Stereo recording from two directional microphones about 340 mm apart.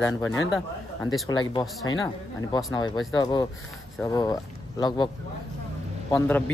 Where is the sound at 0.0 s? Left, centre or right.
Centre.